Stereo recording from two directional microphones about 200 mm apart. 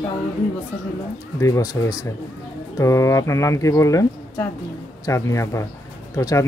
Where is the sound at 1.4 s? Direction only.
15° left (ahead or behind).